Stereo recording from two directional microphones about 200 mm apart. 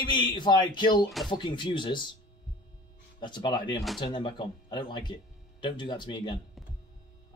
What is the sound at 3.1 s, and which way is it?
Speech, 25° left (ahead or behind).